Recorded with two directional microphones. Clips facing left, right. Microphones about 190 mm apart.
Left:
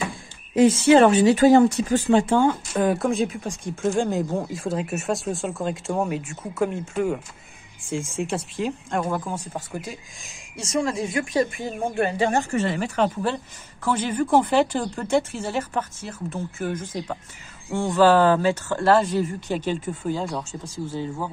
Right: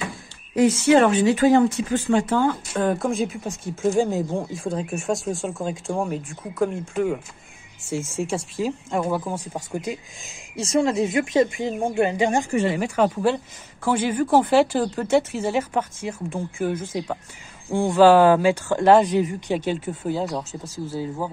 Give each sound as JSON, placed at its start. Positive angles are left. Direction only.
{"t": 0.6, "sound": "speech", "side_deg": 30}
{"t": 2.8, "sound": "speech", "side_deg": 5}
{"t": 10.6, "sound": "speech", "side_deg": -25}